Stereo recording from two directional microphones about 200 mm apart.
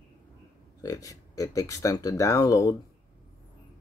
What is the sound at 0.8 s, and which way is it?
Speech, 15° left (ahead or behind).